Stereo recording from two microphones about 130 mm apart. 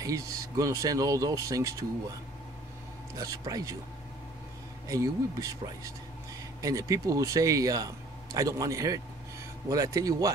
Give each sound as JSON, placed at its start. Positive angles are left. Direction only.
{"t": 0.0, "sound": "speech", "side_deg": -25}
{"t": 3.2, "sound": "speech", "side_deg": -25}
{"t": 4.8, "sound": "speech", "side_deg": -25}